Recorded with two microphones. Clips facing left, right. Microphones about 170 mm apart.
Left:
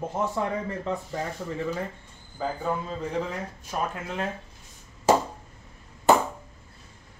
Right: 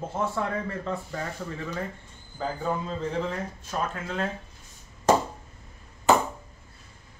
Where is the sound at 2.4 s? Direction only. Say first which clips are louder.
Even; 10° left (ahead or behind).